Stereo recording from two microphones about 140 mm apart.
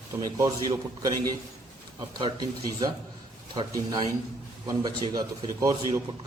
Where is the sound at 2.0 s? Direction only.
30° right (ahead or behind).